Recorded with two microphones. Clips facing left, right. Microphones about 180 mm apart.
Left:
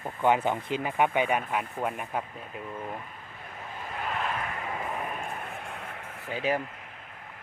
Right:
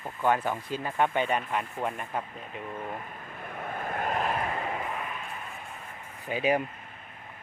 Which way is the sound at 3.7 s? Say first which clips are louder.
Right 4 dB; 50° right (ahead or behind).